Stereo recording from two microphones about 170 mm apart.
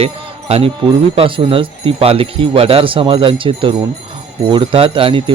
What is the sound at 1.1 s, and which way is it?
Speech, 35° right (ahead or behind).